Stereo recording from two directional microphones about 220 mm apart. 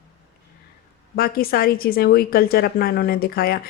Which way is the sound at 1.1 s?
45° left (ahead or behind).